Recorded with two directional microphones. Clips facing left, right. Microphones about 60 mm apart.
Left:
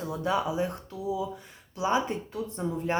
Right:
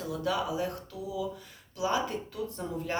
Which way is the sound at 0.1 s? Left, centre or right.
Left.